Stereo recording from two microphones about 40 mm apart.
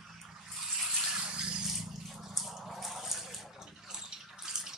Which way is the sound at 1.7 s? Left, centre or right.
Centre.